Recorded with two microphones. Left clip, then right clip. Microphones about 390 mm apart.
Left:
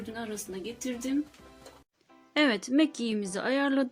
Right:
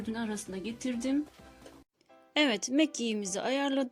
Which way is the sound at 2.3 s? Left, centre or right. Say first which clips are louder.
Left 2 dB; centre.